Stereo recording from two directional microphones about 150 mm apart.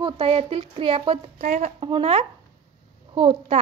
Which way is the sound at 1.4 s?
50° right (ahead or behind).